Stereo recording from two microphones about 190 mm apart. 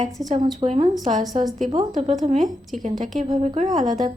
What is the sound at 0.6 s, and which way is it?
Speech, 35° right (ahead or behind).